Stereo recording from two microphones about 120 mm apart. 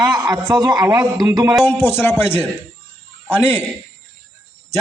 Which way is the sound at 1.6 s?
20° left (ahead or behind).